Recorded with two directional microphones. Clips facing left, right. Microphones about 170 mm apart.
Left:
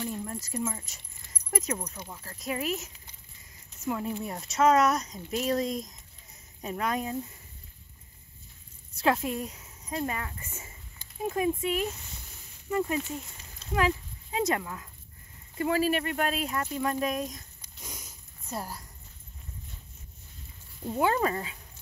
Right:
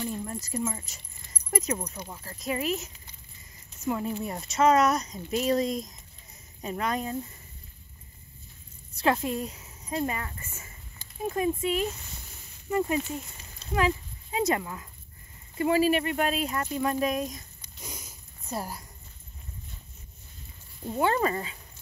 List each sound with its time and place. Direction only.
0.0 s keys jangling: centre (ahead or behind)
2.0 s speech: 5° right (ahead or behind)
8.9 s a woman's voice: centre (ahead or behind)
10.4 s speech: 20° left (ahead or behind)
11.2 s speech: 5° left (ahead or behind)
12.6 s speech: 10° right (ahead or behind)
13.7 s speech: centre (ahead or behind)
20.9 s speech: centre (ahead or behind)